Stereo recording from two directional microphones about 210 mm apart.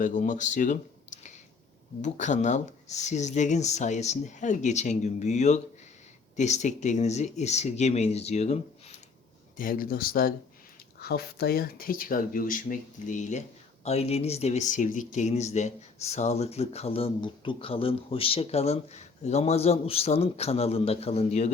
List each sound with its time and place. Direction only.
0.0 s speech: 35° left (ahead or behind)
9.6 s speech: 40° left (ahead or behind)